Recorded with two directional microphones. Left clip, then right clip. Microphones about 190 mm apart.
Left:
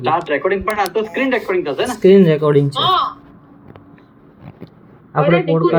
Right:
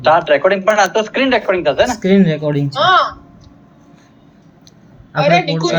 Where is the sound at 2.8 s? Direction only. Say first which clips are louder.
Right 4 dB; 20° right (ahead or behind).